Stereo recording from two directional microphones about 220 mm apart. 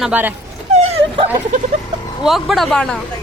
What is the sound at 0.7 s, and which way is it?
Dog, 30° right (ahead or behind).